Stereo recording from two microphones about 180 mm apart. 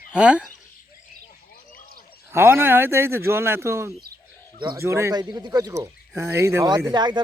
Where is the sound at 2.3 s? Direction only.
10° right (ahead or behind).